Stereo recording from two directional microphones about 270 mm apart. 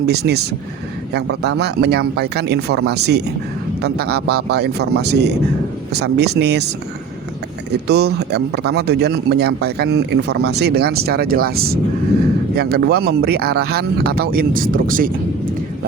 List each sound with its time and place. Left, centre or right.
0.0 s a man's voice: right
7.7 s a man's voice: right